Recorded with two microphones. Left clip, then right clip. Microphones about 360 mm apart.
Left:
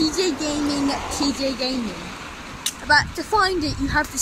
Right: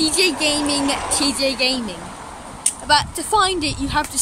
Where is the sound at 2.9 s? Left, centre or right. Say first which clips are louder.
Right 1 dB; centre.